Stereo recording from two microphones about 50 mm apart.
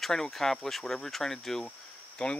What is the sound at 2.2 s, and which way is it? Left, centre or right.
Cricket, left.